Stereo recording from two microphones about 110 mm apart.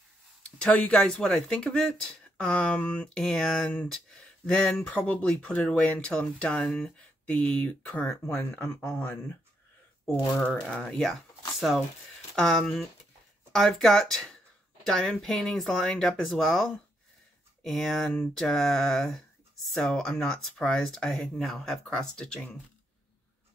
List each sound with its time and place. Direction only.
0.4 s speech: 10° left (ahead or behind)
8.6 s a man's voice: 25° left (ahead or behind)
10.3 s speech: 10° left (ahead or behind)
12.4 s speech: 5° left (ahead or behind)
17.6 s speech: centre (ahead or behind)